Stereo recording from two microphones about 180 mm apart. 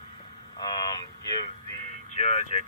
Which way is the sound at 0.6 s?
20° left (ahead or behind).